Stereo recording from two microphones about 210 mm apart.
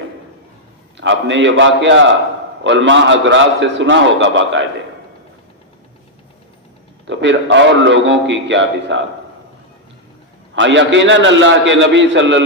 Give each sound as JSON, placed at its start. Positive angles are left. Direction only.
{"t": 0.9, "sound": "a man's voice", "side_deg": -60}
{"t": 7.1, "sound": "a man's voice", "side_deg": -60}
{"t": 10.5, "sound": "a man's voice", "side_deg": -60}